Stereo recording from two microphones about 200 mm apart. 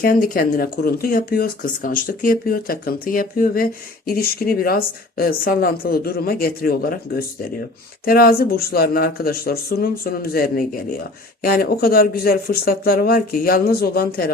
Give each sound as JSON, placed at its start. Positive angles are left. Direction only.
{"t": 0.0, "sound": "speech", "side_deg": 45}